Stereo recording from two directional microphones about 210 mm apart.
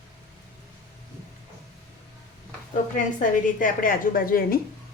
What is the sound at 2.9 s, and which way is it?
A woman's voice, 40° left (ahead or behind).